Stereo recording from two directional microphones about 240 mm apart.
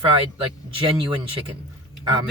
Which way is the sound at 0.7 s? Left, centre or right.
Right.